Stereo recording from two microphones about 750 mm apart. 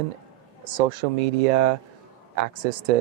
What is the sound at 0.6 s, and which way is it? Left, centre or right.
Speech, right.